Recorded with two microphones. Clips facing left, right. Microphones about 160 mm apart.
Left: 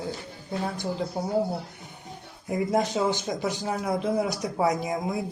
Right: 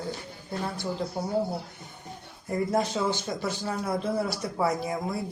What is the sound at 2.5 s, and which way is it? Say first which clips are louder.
Speech: left 2 dB; 15° left (ahead or behind).